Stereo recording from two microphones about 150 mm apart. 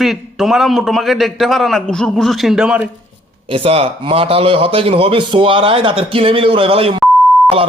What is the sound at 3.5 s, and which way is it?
Speech, 40° right (ahead or behind).